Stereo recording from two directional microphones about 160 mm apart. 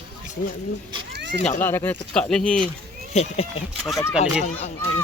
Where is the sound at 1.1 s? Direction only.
90° right.